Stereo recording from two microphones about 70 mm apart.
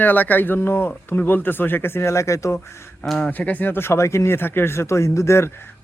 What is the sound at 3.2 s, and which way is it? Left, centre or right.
Speech, left.